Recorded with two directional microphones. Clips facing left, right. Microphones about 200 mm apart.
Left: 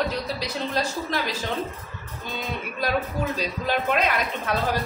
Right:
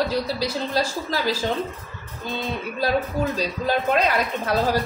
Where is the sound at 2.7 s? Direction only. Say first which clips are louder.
Right 3 dB; 30° right (ahead or behind).